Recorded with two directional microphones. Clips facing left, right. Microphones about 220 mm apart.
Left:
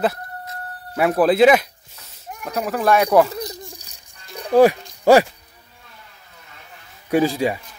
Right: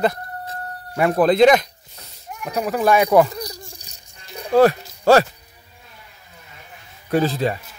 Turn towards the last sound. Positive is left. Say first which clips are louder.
# left 1 dB
turn(degrees=10)  # may be behind; listen again after turning